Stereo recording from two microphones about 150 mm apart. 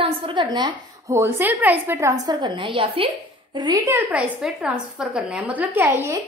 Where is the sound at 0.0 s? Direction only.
30° right (ahead or behind).